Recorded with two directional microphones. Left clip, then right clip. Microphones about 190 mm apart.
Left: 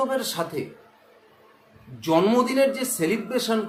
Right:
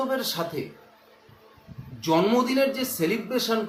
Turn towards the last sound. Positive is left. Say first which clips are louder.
# left 1 dB
turn(degrees=20)  # may be behind; listen again after turning